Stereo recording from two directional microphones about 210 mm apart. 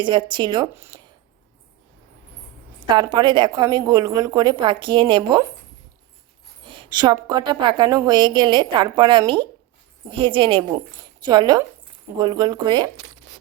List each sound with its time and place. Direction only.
0.0 s a woman's voice: 20° right (ahead or behind)
2.8 s a woman's voice: 20° right (ahead or behind)
6.6 s a woman's voice: 25° right (ahead or behind)